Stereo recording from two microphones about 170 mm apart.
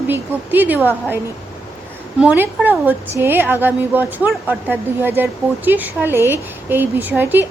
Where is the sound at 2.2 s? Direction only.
10° right (ahead or behind).